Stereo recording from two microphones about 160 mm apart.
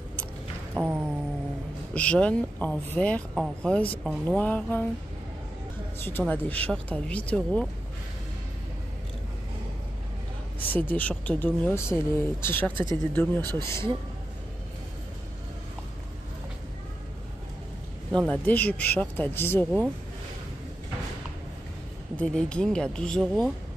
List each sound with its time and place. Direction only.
0.8 s a sound: 10° right (ahead or behind)
2.0 s speech: 10° left (ahead or behind)
5.9 s speech: 15° left (ahead or behind)
10.9 s speech: 10° left (ahead or behind)
18.1 s speech: 5° left (ahead or behind)
22.1 s speech: 5° left (ahead or behind)